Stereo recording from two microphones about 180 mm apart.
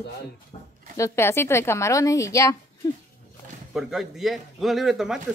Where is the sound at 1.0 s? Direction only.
15° left (ahead or behind).